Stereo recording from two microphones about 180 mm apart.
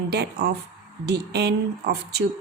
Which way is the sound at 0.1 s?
60° right (ahead or behind).